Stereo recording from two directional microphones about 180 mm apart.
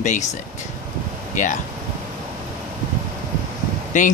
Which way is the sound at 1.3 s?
45° left (ahead or behind).